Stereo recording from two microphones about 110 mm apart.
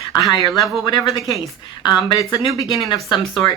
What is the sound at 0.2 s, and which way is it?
Speech, 35° left (ahead or behind).